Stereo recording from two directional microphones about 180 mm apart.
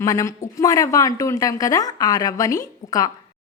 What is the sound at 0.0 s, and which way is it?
A woman's voice, 15° left (ahead or behind).